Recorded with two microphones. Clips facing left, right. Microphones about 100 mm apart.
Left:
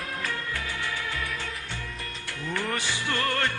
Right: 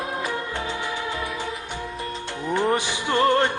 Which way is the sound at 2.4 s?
20° right (ahead or behind).